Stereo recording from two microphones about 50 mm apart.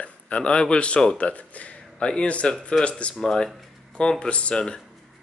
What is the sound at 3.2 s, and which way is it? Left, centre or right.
Speech, centre.